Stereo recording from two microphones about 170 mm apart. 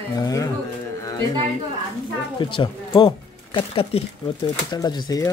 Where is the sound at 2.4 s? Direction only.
30° left (ahead or behind).